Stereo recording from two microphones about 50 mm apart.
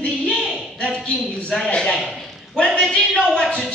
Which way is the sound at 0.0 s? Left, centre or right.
Left.